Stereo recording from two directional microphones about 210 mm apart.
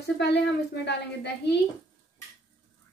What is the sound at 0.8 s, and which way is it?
Speech, 55° left (ahead or behind).